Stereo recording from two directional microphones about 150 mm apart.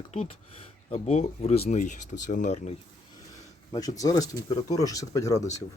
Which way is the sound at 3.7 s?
25° left (ahead or behind).